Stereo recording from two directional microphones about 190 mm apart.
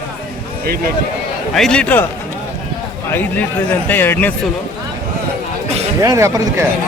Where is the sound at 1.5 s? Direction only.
5° left (ahead or behind).